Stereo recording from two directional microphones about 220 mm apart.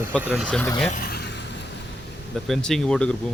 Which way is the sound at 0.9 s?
40° left (ahead or behind).